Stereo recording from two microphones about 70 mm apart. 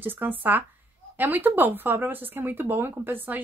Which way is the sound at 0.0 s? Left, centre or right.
Right.